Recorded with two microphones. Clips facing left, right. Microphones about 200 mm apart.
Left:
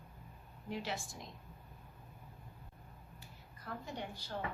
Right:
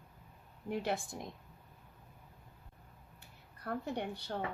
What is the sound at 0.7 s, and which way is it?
Speech, 55° right (ahead or behind).